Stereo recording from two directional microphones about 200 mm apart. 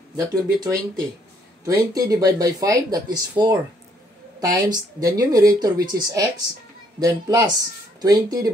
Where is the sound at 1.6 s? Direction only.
15° right (ahead or behind).